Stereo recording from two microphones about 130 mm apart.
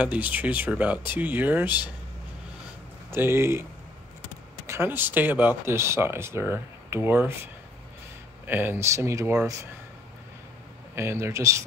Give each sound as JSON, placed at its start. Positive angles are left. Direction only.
{"t": 0.0, "sound": "speech", "side_deg": -10}
{"t": 3.1, "sound": "speech", "side_deg": -20}
{"t": 4.6, "sound": "speech", "side_deg": -15}
{"t": 8.5, "sound": "speech", "side_deg": -15}
{"t": 11.0, "sound": "speech", "side_deg": -20}